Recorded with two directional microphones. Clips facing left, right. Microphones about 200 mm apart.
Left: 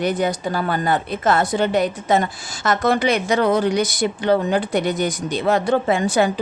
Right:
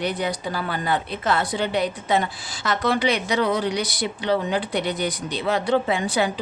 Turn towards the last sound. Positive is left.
turn(degrees=45)  # may be behind; listen again after turning